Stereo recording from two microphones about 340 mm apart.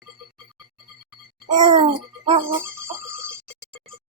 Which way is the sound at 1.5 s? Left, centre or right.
Centre.